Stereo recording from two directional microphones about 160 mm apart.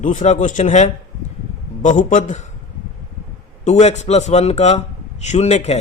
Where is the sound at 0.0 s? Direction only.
50° left (ahead or behind).